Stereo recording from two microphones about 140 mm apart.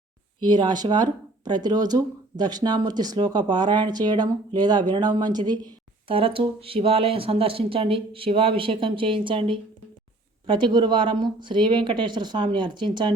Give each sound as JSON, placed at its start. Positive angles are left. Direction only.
{"t": 0.3, "sound": "speech", "side_deg": -30}
{"t": 6.1, "sound": "speech", "side_deg": -40}